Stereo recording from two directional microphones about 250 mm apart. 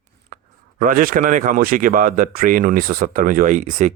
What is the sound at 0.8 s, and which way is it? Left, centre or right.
Speech, right.